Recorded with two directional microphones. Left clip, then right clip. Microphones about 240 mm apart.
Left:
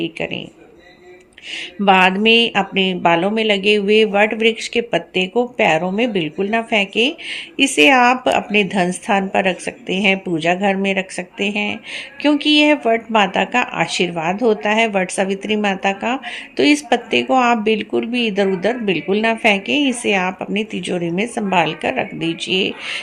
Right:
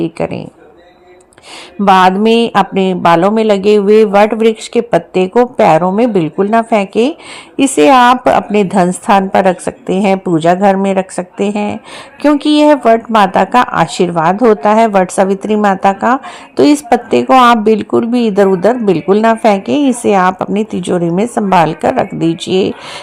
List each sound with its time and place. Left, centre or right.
1.9 s a woman's voice: centre